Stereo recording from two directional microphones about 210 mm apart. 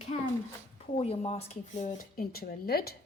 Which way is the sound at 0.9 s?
30° left (ahead or behind).